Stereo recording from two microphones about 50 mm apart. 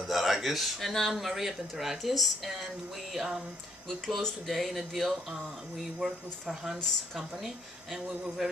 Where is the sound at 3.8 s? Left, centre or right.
Centre.